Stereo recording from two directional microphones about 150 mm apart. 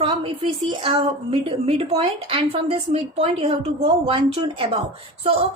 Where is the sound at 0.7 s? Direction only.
35° right (ahead or behind).